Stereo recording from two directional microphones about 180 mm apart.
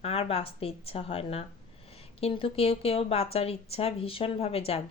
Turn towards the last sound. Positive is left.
turn(degrees=35)  # may be behind; listen again after turning